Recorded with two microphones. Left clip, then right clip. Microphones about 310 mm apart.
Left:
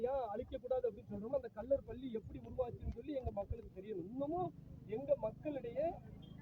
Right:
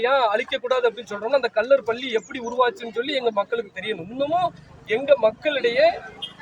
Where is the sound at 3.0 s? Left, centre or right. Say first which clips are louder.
Right 19 dB; centre.